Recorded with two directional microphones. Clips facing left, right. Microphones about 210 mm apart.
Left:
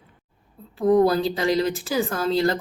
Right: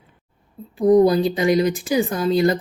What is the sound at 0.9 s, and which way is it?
Speech, 15° right (ahead or behind).